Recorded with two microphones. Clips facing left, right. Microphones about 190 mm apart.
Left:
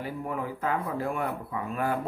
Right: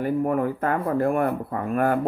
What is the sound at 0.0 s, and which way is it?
Speech, 50° right (ahead or behind).